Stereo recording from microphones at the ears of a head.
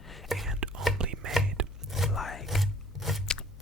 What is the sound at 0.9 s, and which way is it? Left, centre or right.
Chopping, right.